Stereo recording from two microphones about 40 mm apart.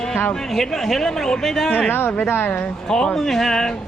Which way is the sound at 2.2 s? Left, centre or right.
Left.